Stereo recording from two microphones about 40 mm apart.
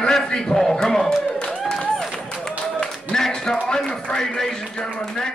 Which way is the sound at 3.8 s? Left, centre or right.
Left.